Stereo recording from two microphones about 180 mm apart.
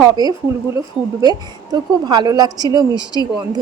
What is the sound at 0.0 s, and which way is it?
A woman's voice, 20° right (ahead or behind).